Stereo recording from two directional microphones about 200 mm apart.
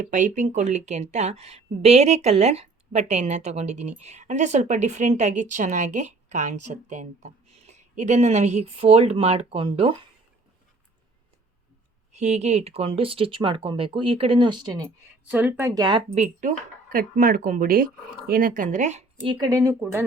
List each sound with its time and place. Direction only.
0.0 s a woman's voice: 40° right (ahead or behind)
12.1 s speech: 35° right (ahead or behind)
15.2 s a woman's voice: 5° right (ahead or behind); by 19.0 s 35° right (ahead or behind)
19.2 s speech: 25° right (ahead or behind)
19.8 s speech: 10° right (ahead or behind)